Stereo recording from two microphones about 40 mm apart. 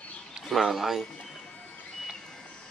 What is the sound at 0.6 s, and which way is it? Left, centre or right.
Speech, centre.